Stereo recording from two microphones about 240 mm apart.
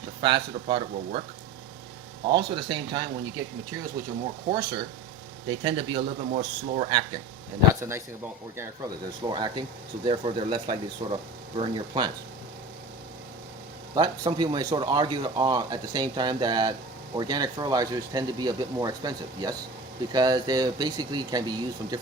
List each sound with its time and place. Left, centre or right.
0.2 s speech: centre
2.3 s speech: right
4.5 s speech: centre
7.7 s speech: centre
9.2 s speech: centre
13.9 s speech: centre